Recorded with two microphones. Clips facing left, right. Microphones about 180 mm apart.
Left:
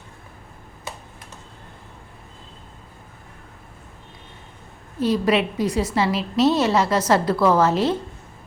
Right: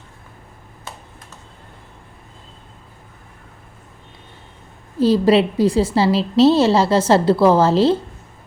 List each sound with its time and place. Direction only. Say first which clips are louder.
4.9 s a woman's voice: right 6 dB; 30° right (ahead or behind)